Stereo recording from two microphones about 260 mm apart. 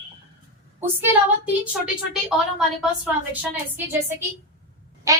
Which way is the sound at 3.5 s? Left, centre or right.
Centre.